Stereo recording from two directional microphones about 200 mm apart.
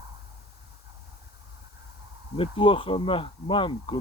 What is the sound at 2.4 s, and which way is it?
Speech, 25° left (ahead or behind).